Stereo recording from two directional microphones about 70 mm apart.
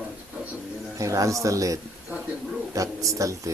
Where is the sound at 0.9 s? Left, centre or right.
Right.